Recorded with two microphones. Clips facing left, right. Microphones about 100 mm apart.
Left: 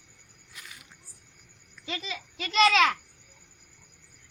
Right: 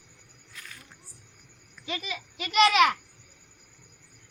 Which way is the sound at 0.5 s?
15° left (ahead or behind).